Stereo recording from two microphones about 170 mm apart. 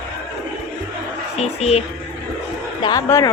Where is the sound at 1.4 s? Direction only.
35° left (ahead or behind).